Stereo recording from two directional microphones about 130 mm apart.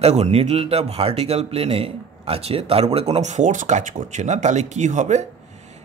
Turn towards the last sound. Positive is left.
turn(degrees=-65)  # may be behind; listen again after turning